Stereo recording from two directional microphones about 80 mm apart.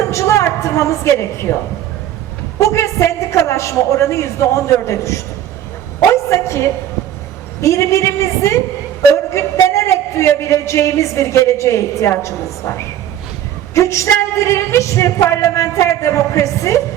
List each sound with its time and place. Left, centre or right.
0.1 s a woman's voice: left
2.6 s speech: left
6.3 s speech: left
7.6 s speech: left